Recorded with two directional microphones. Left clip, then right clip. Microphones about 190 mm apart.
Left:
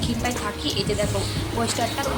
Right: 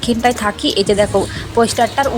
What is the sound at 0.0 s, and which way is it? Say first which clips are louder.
Speech: right 11 dB; 35° right (ahead or behind).